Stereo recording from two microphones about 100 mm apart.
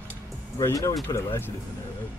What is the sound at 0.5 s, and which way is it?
Speech, 35° left (ahead or behind).